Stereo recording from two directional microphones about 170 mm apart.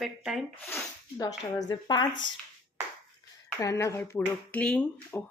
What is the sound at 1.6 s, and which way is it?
Speech, 25° left (ahead or behind).